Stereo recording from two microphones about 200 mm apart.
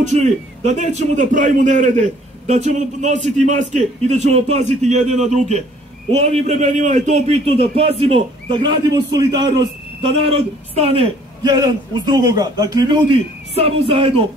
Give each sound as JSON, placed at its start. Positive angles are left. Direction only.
{"t": 0.0, "sound": "a man's voice", "side_deg": -35}